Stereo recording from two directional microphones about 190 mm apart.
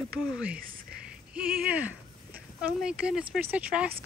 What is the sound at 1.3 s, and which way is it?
Speech, 5° right (ahead or behind).